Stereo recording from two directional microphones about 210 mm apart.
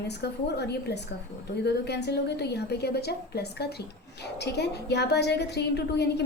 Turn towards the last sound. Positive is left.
turn(degrees=55)  # may be behind; listen again after turning